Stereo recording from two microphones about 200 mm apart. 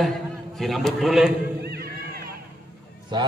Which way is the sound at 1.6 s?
50° right (ahead or behind).